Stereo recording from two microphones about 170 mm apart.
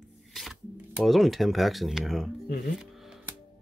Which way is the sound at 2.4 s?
65° left (ahead or behind).